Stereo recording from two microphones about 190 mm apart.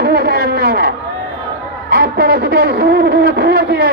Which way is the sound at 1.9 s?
55° right (ahead or behind).